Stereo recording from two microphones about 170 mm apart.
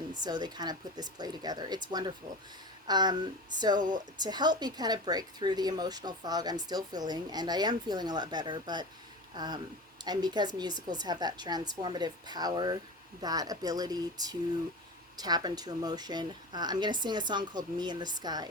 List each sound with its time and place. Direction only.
0.1 s speech: 25° right (ahead or behind)